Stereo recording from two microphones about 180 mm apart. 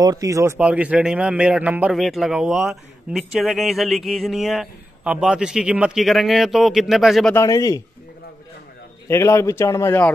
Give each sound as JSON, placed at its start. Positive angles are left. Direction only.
{"t": 0.0, "sound": "a man's voice", "side_deg": -20}
{"t": 7.3, "sound": "a man's voice", "side_deg": 20}
{"t": 9.0, "sound": "a man's voice", "side_deg": 15}